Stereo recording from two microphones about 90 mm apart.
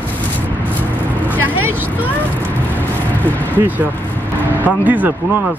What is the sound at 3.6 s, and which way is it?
Speech, 20° right (ahead or behind).